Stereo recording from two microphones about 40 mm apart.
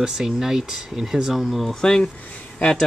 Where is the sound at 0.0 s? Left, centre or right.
Centre.